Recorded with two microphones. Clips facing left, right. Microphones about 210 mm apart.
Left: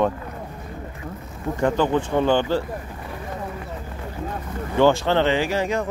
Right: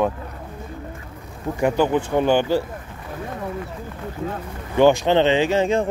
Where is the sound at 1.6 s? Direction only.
10° right (ahead or behind).